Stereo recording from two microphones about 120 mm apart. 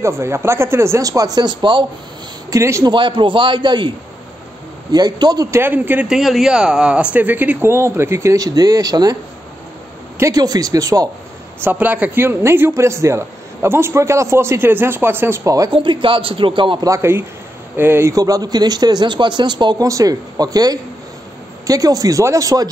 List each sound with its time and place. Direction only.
0.2 s a man's voice: 20° right (ahead or behind); by 1.9 s 40° right (ahead or behind)
2.5 s a man's voice: 25° right (ahead or behind)
2.9 s a man's voice: 40° right (ahead or behind)
4.9 s speech: 35° right (ahead or behind)
5.6 s speech: 15° right (ahead or behind); by 9.1 s 30° right (ahead or behind)
10.1 s a man's voice: 30° right (ahead or behind)
11.6 s a man's voice: 15° right (ahead or behind)
15.7 s a man's voice: 45° right (ahead or behind)
16.8 s a man's voice: 25° right (ahead or behind)